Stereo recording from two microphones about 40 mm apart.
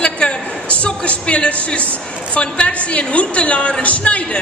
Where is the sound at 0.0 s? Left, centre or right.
Left.